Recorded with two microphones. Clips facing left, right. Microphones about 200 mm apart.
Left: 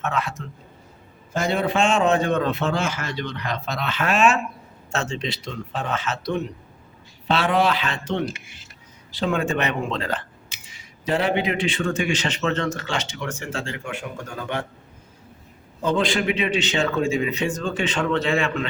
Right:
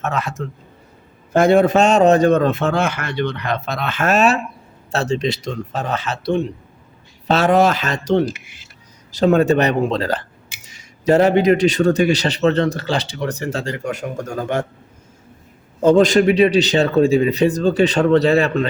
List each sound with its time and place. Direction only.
0.0 s a man's voice: 40° right (ahead or behind)
1.3 s a man's voice: 55° right (ahead or behind); by 6.5 s 30° right (ahead or behind)
7.3 s a man's voice: 45° right (ahead or behind)
15.8 s a man's voice: 45° right (ahead or behind)